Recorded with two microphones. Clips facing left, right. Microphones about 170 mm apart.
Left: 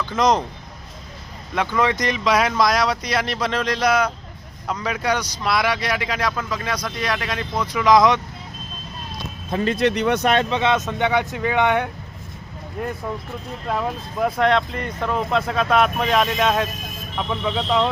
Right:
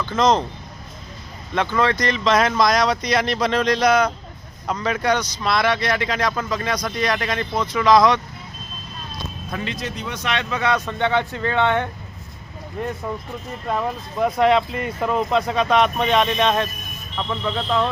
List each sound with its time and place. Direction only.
0.2 s speech: 15° left (ahead or behind)
1.5 s speech: 10° left (ahead or behind)
9.7 s speech: 70° left (ahead or behind); by 10.4 s 55° left (ahead or behind)
10.5 s speech: 20° left (ahead or behind)
12.8 s speech: 5° left (ahead or behind)